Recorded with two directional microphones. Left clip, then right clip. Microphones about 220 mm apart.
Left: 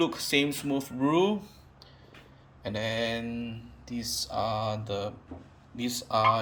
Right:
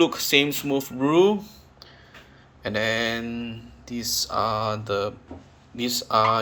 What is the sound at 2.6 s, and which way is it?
Speech, 5° left (ahead or behind).